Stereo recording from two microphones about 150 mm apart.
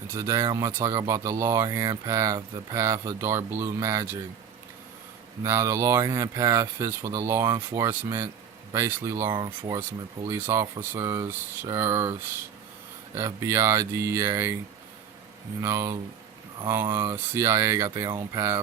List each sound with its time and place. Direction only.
0.1 s speech: 20° right (ahead or behind)
5.4 s speech: 20° right (ahead or behind)
15.6 s speech: 20° right (ahead or behind)